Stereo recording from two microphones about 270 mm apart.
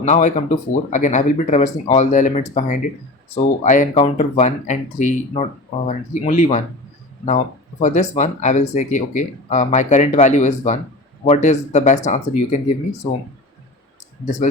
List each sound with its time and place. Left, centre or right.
0.0 s speech: left